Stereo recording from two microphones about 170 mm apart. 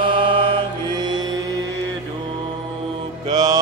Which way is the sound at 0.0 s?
30° right (ahead or behind).